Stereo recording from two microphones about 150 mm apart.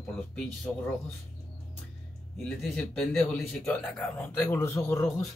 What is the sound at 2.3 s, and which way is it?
Speech, centre (ahead or behind).